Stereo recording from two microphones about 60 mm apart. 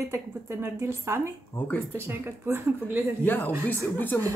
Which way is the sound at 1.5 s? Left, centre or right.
Left.